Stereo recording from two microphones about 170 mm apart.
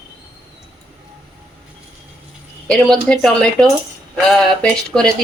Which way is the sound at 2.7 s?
Centre (ahead or behind).